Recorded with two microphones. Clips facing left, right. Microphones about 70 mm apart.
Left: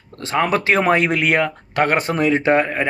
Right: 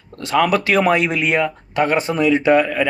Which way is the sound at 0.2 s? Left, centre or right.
Left.